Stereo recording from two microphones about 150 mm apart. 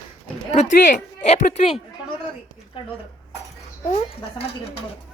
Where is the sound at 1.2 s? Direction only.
50° left (ahead or behind).